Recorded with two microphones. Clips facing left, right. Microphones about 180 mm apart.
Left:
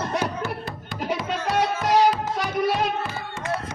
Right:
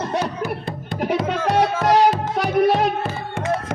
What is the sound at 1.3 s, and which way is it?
Music, 60° right (ahead or behind).